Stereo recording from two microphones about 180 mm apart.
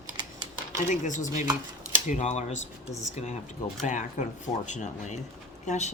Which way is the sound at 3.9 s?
45° left (ahead or behind).